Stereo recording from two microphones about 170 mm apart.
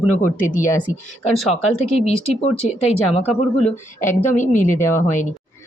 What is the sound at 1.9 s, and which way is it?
Speech, 35° left (ahead or behind).